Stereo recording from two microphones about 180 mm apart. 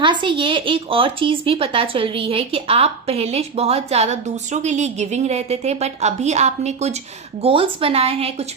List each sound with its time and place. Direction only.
0.0 s a woman's voice: 25° right (ahead or behind)